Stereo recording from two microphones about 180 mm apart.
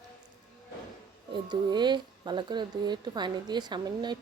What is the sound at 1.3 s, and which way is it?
Speech, 25° right (ahead or behind).